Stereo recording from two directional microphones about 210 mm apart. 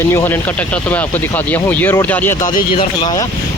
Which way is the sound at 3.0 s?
20° left (ahead or behind).